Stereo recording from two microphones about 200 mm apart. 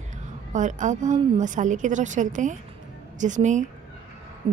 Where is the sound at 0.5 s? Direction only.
40° right (ahead or behind).